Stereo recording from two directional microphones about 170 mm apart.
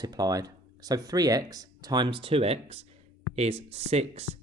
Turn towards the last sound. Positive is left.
turn(degrees=-40)  # may be behind; listen again after turning